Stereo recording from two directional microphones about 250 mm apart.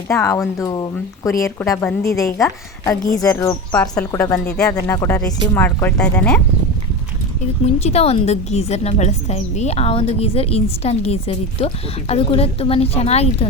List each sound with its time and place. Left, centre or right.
0.1 s speech: centre
7.6 s a woman's voice: left